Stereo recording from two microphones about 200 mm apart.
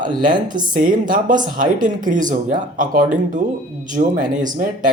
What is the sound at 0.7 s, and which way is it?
A woman's voice, 40° right (ahead or behind).